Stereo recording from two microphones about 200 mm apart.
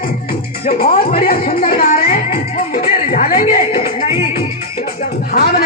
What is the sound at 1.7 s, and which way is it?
Music, 45° left (ahead or behind).